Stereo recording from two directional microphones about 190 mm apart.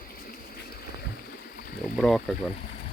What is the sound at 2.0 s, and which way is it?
Speech, centre (ahead or behind).